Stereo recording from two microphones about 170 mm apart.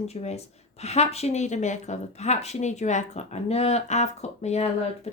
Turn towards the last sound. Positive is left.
turn(degrees=40)  # may be behind; listen again after turning